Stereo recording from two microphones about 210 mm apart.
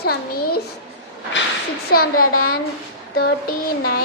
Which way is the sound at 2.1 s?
90° left.